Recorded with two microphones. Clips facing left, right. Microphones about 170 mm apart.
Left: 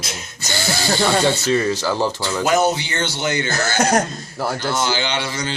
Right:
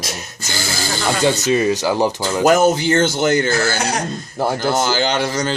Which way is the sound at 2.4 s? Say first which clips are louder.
Right 5 dB; 50° right (ahead or behind).